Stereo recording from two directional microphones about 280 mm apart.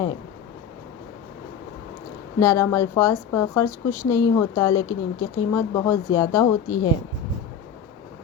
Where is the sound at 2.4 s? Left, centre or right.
Centre.